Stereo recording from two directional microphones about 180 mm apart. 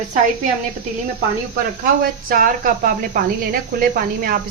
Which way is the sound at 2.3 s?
50° right (ahead or behind).